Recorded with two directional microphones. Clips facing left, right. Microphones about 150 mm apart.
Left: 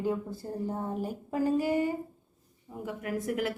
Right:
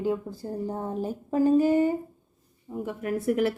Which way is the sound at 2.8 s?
30° right (ahead or behind).